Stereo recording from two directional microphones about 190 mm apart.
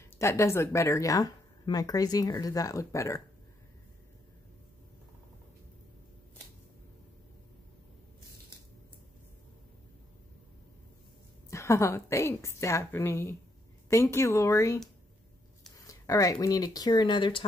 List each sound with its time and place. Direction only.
0.2 s speech: 15° left (ahead or behind)
11.5 s speech: 15° left (ahead or behind)
15.9 s speech: 15° left (ahead or behind)